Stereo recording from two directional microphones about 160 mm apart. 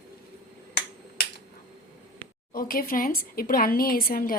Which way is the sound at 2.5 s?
65° left (ahead or behind).